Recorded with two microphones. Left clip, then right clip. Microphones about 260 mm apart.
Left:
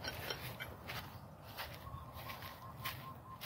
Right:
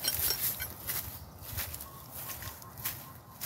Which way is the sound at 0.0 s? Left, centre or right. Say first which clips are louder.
Right 8 dB; right.